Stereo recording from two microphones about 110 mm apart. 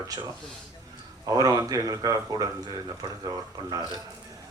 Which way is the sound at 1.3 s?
30° right (ahead or behind).